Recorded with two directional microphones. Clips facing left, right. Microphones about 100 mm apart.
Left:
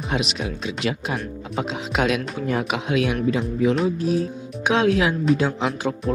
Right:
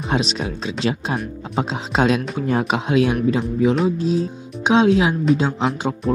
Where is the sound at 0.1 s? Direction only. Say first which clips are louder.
Right 4 dB; 30° right (ahead or behind).